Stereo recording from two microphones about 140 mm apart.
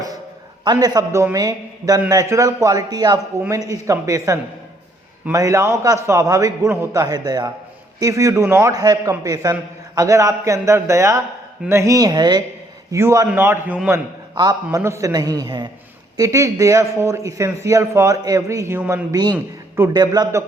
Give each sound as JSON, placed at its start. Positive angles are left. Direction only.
{"t": 0.6, "sound": "a man's voice", "side_deg": -30}
{"t": 14.3, "sound": "a man's voice", "side_deg": -30}
{"t": 19.1, "sound": "a man's voice", "side_deg": -30}